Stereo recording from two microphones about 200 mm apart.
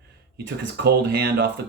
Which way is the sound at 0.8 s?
55° right (ahead or behind).